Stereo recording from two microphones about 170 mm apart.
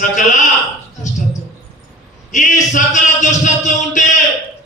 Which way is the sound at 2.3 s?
45° left (ahead or behind).